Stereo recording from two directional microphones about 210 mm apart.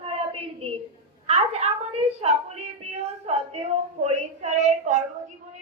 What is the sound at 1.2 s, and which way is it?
A woman's voice, 30° right (ahead or behind).